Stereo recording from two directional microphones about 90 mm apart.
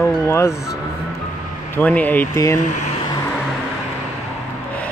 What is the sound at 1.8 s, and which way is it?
Speech, 15° left (ahead or behind).